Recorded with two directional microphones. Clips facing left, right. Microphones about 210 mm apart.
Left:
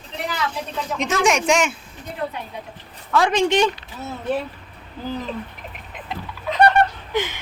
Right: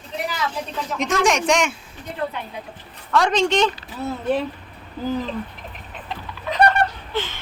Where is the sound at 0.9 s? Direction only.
Centre (ahead or behind).